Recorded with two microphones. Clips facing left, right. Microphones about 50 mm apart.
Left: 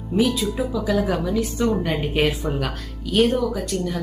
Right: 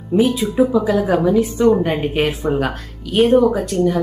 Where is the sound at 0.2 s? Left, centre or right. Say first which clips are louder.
Right 6 dB; right.